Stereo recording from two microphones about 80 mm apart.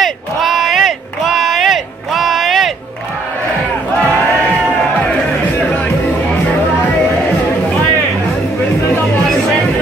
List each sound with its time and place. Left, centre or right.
0.0 s crowd: centre
3.9 s crowd: centre